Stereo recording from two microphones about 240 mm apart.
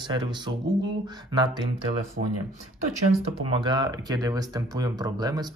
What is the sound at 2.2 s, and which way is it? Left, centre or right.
Speech, right.